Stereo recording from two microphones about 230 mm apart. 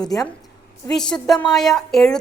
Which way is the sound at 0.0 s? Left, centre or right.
Centre.